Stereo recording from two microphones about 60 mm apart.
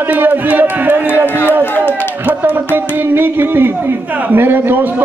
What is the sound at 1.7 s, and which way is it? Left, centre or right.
Speech, left.